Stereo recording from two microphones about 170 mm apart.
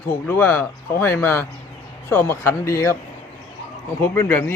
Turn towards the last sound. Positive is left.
turn(degrees=15)  # may be behind; listen again after turning